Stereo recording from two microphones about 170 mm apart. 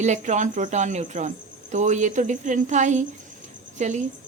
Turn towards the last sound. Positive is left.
turn(degrees=-45)  # may be behind; listen again after turning